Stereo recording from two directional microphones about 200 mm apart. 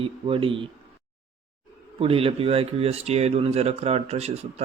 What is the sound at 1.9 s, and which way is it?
Speech, 30° right (ahead or behind).